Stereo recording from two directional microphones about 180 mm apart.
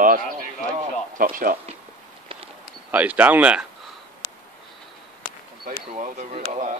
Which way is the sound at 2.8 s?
10° right (ahead or behind).